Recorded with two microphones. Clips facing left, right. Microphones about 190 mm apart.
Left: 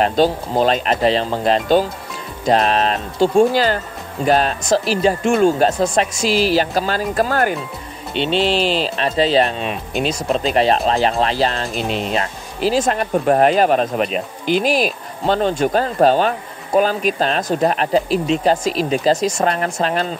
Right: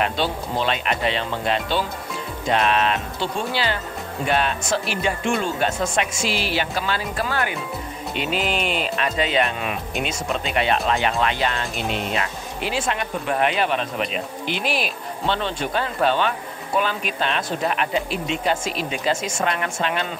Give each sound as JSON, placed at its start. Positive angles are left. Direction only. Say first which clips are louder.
{"t": 0.0, "sound": "speech", "louder": "left 8 dB", "side_deg": 40}
{"t": 8.1, "sound": "speech", "louder": "left 7 dB", "side_deg": 30}